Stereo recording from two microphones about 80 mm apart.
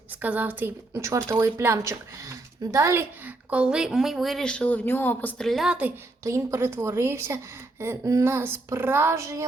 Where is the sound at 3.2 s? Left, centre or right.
Centre; by 5.3 s left.